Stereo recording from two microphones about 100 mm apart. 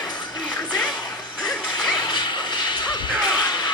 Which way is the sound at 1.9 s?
50° left (ahead or behind).